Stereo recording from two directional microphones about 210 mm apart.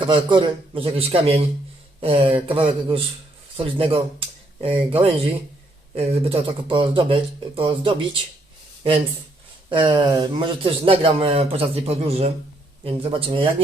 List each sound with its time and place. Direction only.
0.1 s a man's voice: 25° right (ahead or behind)
9.6 s a man's voice: 25° right (ahead or behind)